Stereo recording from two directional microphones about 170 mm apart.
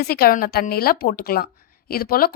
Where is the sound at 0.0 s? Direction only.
65° left (ahead or behind).